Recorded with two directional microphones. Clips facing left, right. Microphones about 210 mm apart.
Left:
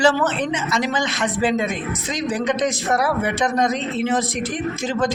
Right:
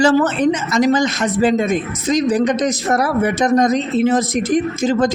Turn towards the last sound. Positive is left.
turn(degrees=-40)  # may be behind; listen again after turning